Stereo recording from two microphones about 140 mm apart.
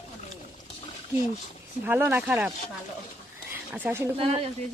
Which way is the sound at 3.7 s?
15° right (ahead or behind).